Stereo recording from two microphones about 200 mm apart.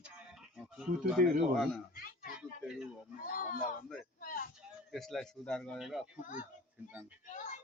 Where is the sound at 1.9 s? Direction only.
45° left (ahead or behind).